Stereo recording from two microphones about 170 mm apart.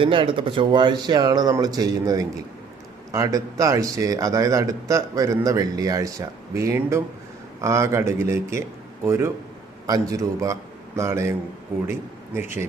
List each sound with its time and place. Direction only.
0.0 s a man's voice: 30° right (ahead or behind); by 12.6 s 15° right (ahead or behind)